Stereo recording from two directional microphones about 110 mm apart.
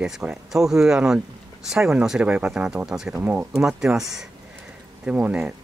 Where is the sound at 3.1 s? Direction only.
20° right (ahead or behind).